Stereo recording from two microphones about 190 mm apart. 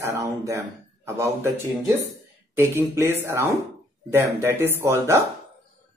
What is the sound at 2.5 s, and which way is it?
Speech, 10° right (ahead or behind).